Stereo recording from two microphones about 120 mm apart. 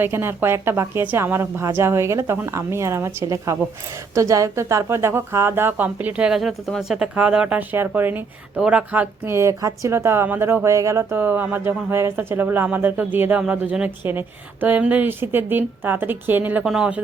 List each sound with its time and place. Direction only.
0.0 s a woman's voice: 20° right (ahead or behind)